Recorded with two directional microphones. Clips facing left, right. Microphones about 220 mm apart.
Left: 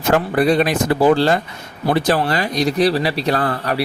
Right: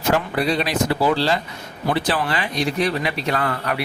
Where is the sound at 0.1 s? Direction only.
50° left (ahead or behind).